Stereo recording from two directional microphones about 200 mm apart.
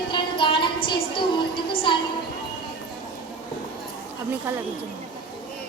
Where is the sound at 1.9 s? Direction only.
25° left (ahead or behind).